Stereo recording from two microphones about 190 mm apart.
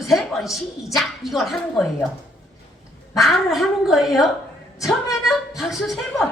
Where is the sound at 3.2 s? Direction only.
Centre (ahead or behind).